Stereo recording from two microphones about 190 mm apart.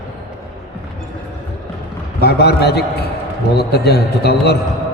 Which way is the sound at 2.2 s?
60° left (ahead or behind).